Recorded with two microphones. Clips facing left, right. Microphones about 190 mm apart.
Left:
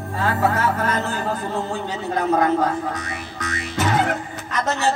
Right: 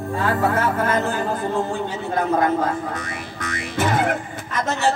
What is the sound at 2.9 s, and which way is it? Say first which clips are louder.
Music: even; 55° right (ahead or behind).